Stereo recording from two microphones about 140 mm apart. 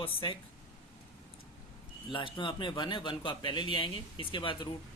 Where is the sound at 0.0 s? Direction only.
40° left (ahead or behind).